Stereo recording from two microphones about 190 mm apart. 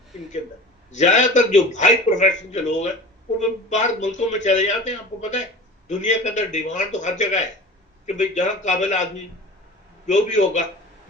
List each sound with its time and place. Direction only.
0.9 s a man's voice: 40° left (ahead or behind)